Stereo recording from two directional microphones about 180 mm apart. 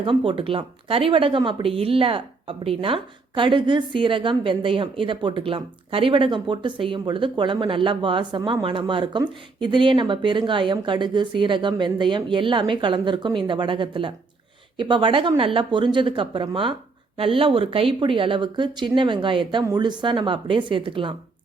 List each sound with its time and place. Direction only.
0.0 s speech: 30° right (ahead or behind)